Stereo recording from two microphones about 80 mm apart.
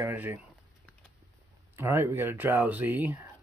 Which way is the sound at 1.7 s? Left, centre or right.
Right.